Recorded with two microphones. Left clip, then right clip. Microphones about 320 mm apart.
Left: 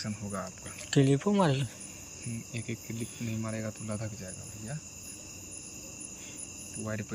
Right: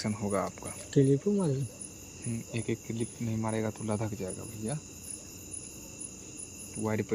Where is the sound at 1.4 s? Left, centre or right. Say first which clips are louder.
Left 5 dB; centre.